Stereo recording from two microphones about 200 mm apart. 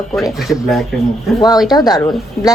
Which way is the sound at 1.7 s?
20° left (ahead or behind).